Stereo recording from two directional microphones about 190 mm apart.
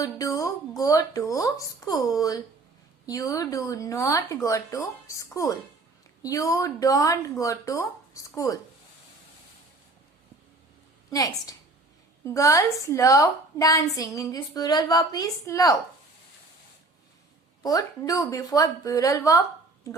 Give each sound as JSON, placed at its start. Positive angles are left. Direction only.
{"t": 0.0, "sound": "a woman's voice", "side_deg": 15}
{"t": 11.1, "sound": "a woman's voice", "side_deg": 20}
{"t": 17.6, "sound": "a woman's voice", "side_deg": 20}